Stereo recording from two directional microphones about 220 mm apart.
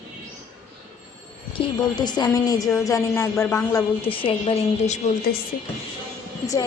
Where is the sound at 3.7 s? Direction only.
25° left (ahead or behind).